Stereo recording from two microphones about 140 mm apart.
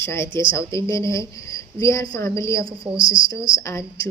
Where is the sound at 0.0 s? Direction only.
20° left (ahead or behind).